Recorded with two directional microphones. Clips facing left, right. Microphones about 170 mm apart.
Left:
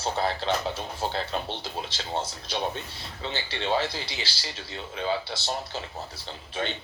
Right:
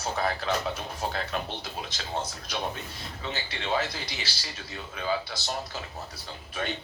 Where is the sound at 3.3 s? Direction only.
30° left (ahead or behind).